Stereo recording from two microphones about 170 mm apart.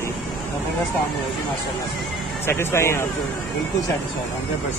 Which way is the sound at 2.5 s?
15° left (ahead or behind).